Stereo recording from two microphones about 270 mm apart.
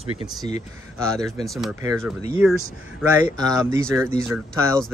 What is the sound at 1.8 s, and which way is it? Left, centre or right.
Speech, centre.